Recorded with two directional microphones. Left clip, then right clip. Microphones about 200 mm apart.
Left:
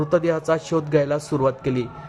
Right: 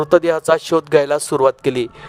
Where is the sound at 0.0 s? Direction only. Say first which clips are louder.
Right 6 dB; 45° right (ahead or behind).